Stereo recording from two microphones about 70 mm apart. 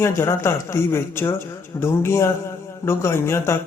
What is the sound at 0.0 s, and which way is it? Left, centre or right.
A man's voice, left.